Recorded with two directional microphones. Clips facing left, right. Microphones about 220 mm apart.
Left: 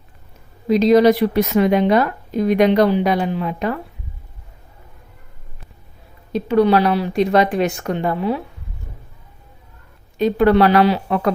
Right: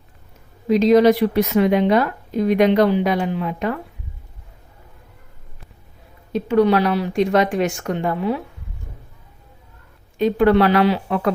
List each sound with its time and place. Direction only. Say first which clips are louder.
0.7 s speech: left 1 dB; 35° left (ahead or behind)
6.3 s speech: left 1 dB; 35° left (ahead or behind)
10.2 s speech: left 1 dB; 40° left (ahead or behind)